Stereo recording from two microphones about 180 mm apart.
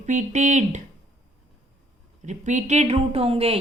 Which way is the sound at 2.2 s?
40° right (ahead or behind).